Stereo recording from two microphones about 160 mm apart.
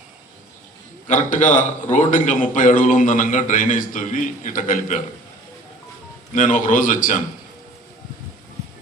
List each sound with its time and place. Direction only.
1.0 s a man's voice: 50° left (ahead or behind)
6.3 s a man's voice: 55° left (ahead or behind)